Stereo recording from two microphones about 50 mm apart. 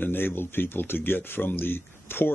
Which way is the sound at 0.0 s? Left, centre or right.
Left.